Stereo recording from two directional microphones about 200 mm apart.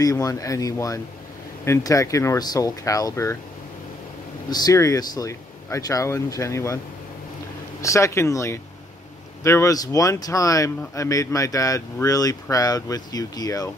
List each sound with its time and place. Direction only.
0.0 s speech: 15° left (ahead or behind)
4.5 s speech: 20° left (ahead or behind)
7.8 s speech: 15° left (ahead or behind)